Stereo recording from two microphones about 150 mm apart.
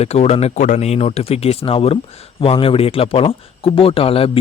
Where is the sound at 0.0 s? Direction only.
45° left (ahead or behind).